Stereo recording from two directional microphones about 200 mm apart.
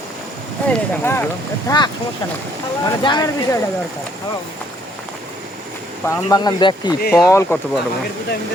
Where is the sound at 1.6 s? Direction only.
20° left (ahead or behind).